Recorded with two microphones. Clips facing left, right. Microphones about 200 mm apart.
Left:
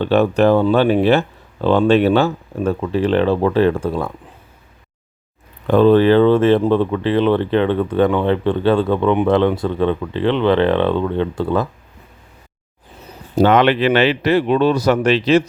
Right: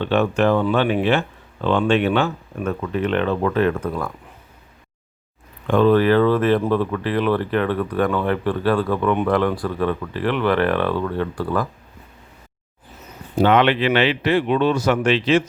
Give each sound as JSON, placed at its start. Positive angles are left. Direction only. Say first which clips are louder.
{"t": 0.0, "sound": "speech", "louder": "left 4 dB", "side_deg": 35}
{"t": 5.6, "sound": "speech", "louder": "left 4 dB", "side_deg": 35}
{"t": 13.3, "sound": "speech", "louder": "left 3 dB", "side_deg": 40}